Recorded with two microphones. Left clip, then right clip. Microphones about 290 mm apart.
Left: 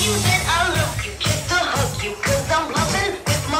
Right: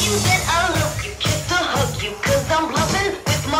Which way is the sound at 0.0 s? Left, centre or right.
Right.